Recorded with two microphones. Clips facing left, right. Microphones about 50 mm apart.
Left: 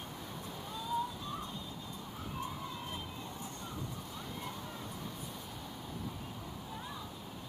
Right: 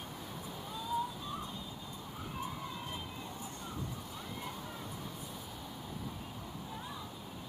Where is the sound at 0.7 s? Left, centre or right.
Centre.